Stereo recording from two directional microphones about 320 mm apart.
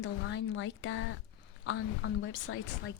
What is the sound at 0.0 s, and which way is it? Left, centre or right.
Speech, left.